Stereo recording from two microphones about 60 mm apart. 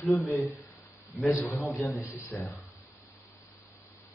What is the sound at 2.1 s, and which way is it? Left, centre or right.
Speech, left.